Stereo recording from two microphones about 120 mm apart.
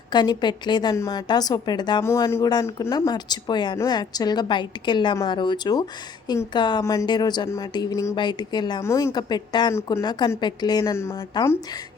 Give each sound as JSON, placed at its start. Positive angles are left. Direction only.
{"t": 0.1, "sound": "speech", "side_deg": 35}
{"t": 2.0, "sound": "speech", "side_deg": 25}
{"t": 8.1, "sound": "speech", "side_deg": 40}
{"t": 8.8, "sound": "speech", "side_deg": 25}
{"t": 10.9, "sound": "speech", "side_deg": 20}